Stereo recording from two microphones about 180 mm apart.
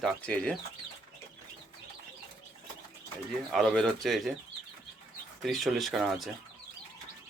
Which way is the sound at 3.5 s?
5° left (ahead or behind).